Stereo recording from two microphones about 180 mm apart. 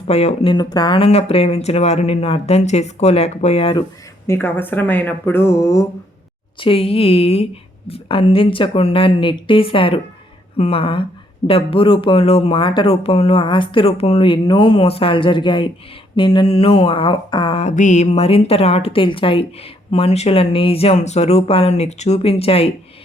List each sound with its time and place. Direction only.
0.1 s mantra: 35° left (ahead or behind)
0.5 s mantra: 20° left (ahead or behind)
4.3 s speech: 10° left (ahead or behind)
6.6 s mantra: 30° left (ahead or behind)
11.4 s speech: 30° left (ahead or behind)
16.1 s mantra: 25° left (ahead or behind)